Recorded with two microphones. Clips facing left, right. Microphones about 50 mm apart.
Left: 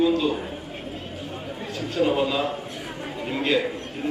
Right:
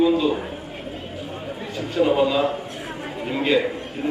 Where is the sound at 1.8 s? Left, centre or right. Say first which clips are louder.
Right 4 dB; centre.